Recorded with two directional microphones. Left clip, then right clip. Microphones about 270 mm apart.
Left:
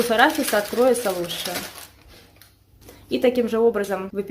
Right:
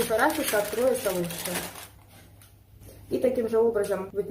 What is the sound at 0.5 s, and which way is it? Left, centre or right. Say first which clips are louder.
Speech: left 4 dB; left.